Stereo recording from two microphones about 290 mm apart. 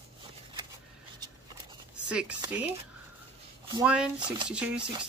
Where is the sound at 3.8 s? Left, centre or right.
Centre.